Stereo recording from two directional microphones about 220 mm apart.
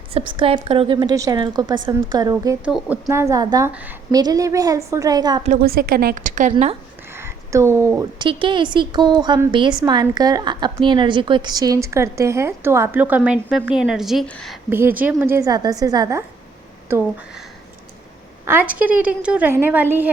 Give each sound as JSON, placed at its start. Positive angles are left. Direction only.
{"t": 0.1, "sound": "a woman's voice", "side_deg": -25}
{"t": 5.4, "sound": "a woman's voice", "side_deg": -40}
{"t": 7.1, "sound": "a woman's voice", "side_deg": -10}
{"t": 14.7, "sound": "a woman's voice", "side_deg": -10}
{"t": 18.4, "sound": "a woman's voice", "side_deg": -10}